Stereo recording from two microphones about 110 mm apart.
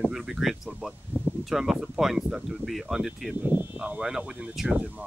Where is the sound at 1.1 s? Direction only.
15° right (ahead or behind).